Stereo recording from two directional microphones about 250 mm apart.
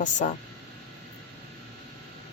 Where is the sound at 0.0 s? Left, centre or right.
Left.